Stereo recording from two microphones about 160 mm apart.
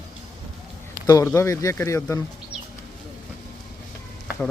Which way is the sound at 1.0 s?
20° left (ahead or behind).